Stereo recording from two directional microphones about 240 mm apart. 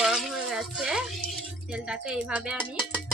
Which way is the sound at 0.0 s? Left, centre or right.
Centre.